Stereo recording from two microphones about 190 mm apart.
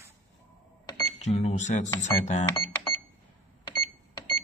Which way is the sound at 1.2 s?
35° left (ahead or behind).